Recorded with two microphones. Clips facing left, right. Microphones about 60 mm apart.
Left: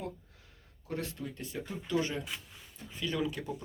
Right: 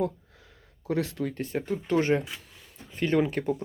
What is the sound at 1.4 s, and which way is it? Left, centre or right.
Speech, right.